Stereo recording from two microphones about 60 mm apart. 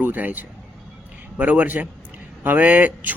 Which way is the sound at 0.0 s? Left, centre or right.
Right.